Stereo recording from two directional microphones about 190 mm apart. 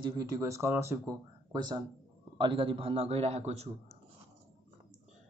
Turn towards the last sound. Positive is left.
turn(degrees=-35)  # may be behind; listen again after turning